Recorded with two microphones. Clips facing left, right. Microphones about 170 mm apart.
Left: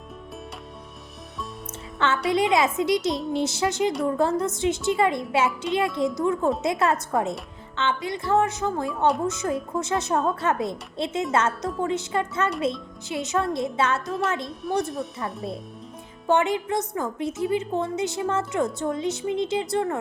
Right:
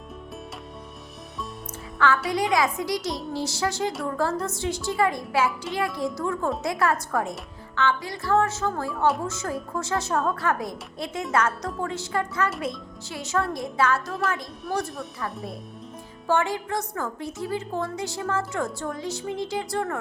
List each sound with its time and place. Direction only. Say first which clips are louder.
2.0 s a woman's voice: left 1 dB; 25° left (ahead or behind)
14.6 s speech: left 4 dB; centre (ahead or behind)
16.2 s a woman's voice: left 3 dB; 20° left (ahead or behind)